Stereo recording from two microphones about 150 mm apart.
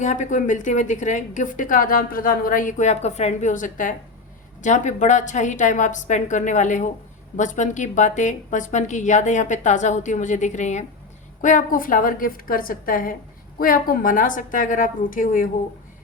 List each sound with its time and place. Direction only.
0.0 s a woman's voice: 55° left (ahead or behind)
11.4 s a woman's voice: 65° left (ahead or behind)